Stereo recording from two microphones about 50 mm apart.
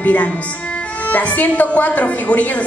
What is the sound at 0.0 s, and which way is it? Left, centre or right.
A woman's voice, left.